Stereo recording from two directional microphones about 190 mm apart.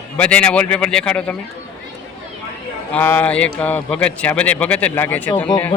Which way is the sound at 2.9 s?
10° left (ahead or behind).